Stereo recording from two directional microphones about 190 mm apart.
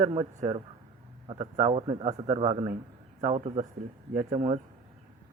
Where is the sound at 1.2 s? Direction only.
35° right (ahead or behind).